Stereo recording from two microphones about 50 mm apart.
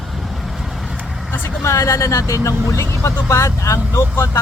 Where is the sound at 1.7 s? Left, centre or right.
Left.